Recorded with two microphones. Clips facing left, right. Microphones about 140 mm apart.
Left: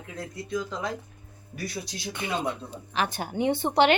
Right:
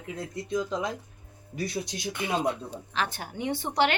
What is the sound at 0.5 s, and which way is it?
Speech, 20° right (ahead or behind).